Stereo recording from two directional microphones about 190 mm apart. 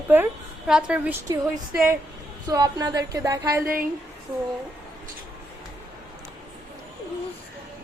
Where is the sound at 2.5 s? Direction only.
20° right (ahead or behind).